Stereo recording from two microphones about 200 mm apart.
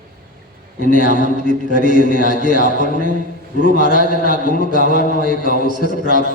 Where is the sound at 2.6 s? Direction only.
40° right (ahead or behind).